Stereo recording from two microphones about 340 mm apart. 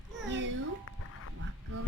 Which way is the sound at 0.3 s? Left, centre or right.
Right.